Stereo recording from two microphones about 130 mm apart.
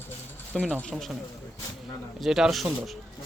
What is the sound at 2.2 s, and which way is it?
Speech, 5° right (ahead or behind).